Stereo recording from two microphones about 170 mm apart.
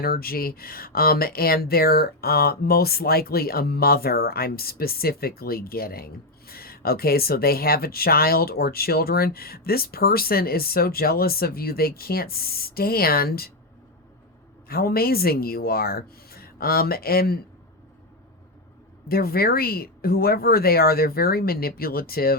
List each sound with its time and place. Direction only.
0.0 s speech: 60° left (ahead or behind)
14.7 s speech: 60° left (ahead or behind)
19.0 s speech: 65° left (ahead or behind)